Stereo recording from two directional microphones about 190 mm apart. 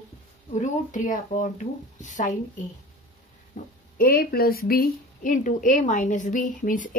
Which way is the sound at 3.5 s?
40° left (ahead or behind).